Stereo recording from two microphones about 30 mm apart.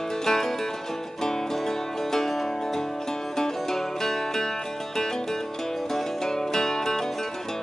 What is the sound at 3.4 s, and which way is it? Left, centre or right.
Music, centre.